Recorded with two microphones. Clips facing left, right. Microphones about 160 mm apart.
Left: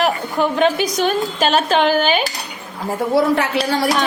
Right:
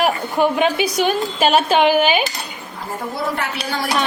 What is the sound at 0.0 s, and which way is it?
A woman's voice, 10° right (ahead or behind).